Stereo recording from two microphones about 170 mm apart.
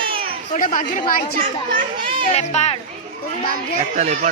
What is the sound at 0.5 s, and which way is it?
Speech, 55° left (ahead or behind).